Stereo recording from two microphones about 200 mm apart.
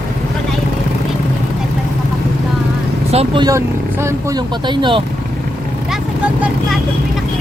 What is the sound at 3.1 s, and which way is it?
Speech, 25° right (ahead or behind).